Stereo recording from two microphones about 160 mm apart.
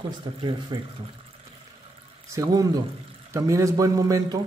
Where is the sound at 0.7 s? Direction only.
25° right (ahead or behind).